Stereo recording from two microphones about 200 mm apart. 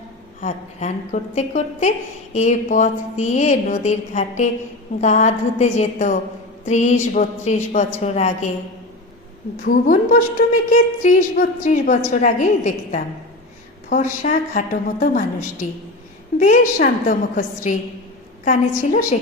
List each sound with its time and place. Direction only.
0.4 s a woman's voice: 35° left (ahead or behind)
9.6 s a woman's voice: 40° left (ahead or behind)